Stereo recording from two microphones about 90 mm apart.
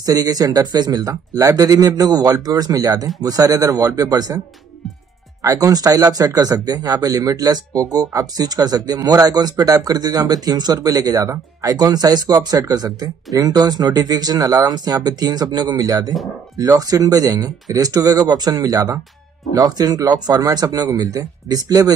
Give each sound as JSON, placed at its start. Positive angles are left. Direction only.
{"t": 0.0, "sound": "speech", "side_deg": -45}
{"t": 5.4, "sound": "speech", "side_deg": -40}